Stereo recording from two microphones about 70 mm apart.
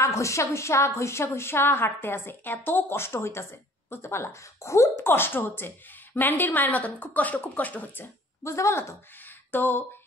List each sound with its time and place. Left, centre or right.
0.0 s a woman's voice: left
8.5 s speech: left
9.2 s a sound: left